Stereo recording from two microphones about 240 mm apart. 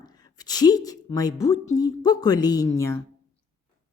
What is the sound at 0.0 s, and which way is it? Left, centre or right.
A woman's voice, centre.